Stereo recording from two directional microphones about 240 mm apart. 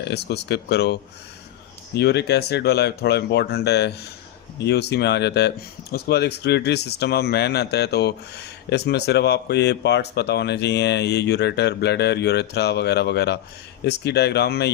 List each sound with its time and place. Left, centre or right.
0.0 s speech: left